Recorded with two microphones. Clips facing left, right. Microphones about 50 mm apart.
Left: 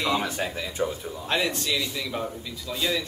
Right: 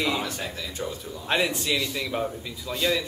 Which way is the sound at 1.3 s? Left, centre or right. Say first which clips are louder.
Right 2 dB; centre.